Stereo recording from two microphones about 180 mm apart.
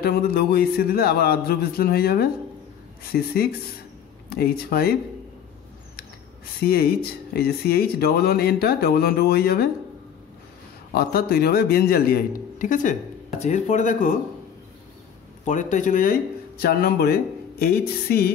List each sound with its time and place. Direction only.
0.0 s speech: 60° left (ahead or behind)
6.6 s speech: 55° left (ahead or behind)
11.0 s speech: 60° left (ahead or behind); by 14.1 s 45° left (ahead or behind)
15.4 s speech: 45° left (ahead or behind); by 18.3 s 60° left (ahead or behind)